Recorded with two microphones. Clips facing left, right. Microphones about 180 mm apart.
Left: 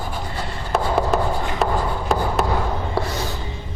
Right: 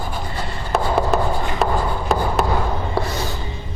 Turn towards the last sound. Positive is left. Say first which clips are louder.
# right 1 dB
turn(degrees=-30)  # may be behind; listen again after turning